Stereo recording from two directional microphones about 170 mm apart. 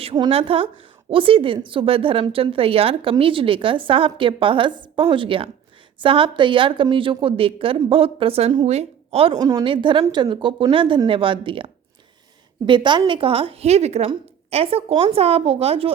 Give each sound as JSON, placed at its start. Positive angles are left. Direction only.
{"t": 0.0, "sound": "a woman's voice", "side_deg": -30}
{"t": 9.4, "sound": "a woman's voice", "side_deg": -20}